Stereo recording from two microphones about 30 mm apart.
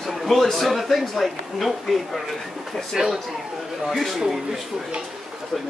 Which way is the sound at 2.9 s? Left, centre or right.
Centre.